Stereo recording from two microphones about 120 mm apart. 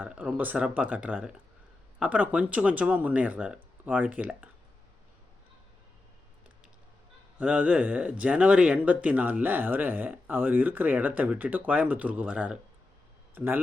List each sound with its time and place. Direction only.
0.0 s speech: 10° right (ahead or behind)
7.3 s speech: 10° right (ahead or behind)